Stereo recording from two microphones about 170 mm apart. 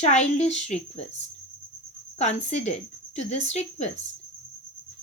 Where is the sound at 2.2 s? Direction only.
40° left (ahead or behind).